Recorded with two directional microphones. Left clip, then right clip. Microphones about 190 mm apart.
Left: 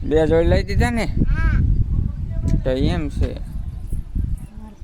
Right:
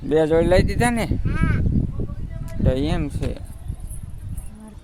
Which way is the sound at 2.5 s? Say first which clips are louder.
Left 2 dB; 5° left (ahead or behind).